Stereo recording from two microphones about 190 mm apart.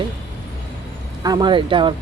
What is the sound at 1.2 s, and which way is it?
Speech, 25° right (ahead or behind).